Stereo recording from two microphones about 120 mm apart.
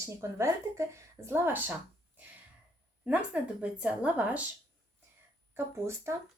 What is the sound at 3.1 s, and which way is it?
Speech, 10° right (ahead or behind).